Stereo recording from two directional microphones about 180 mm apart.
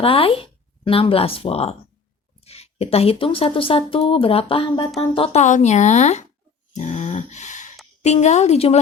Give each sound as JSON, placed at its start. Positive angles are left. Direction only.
{"t": 0.0, "sound": "speech", "side_deg": 30}